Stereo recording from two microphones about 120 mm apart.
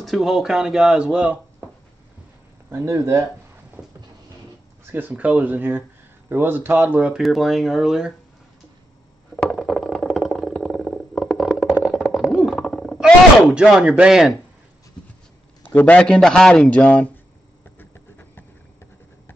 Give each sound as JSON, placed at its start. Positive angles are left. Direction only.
{"t": 0.0, "sound": "speech", "side_deg": 0}
{"t": 2.7, "sound": "speech", "side_deg": -20}
{"t": 4.9, "sound": "speech", "side_deg": -10}
{"t": 7.0, "sound": "speech", "side_deg": -5}
{"t": 9.3, "sound": "a sound", "side_deg": 0}
{"t": 15.6, "sound": "speech", "side_deg": 15}
{"t": 17.7, "sound": "a sound", "side_deg": 15}